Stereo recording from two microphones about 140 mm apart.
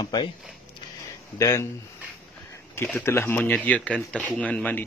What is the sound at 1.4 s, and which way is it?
Speech, 20° left (ahead or behind).